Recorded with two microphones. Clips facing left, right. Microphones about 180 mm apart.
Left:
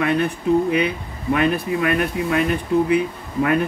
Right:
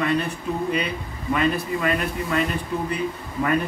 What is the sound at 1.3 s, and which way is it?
Speech, 60° left (ahead or behind).